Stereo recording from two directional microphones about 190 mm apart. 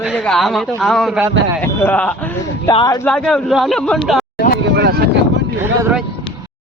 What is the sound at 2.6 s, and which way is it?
Speech, 20° left (ahead or behind).